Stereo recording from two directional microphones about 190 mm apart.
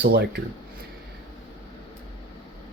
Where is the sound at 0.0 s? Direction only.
55° right (ahead or behind).